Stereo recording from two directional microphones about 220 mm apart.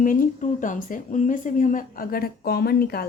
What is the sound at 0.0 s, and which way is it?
Speech, 40° left (ahead or behind).